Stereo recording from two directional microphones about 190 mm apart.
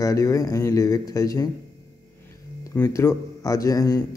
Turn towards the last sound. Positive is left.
turn(degrees=15)  # may be behind; listen again after turning